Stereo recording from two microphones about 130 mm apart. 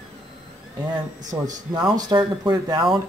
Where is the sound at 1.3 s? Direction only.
25° right (ahead or behind).